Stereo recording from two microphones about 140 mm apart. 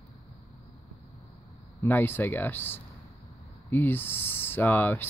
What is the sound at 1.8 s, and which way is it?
Speech, 15° left (ahead or behind).